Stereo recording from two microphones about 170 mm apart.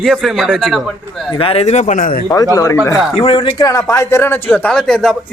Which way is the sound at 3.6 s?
20° left (ahead or behind).